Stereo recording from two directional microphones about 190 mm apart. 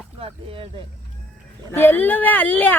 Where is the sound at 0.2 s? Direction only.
30° right (ahead or behind).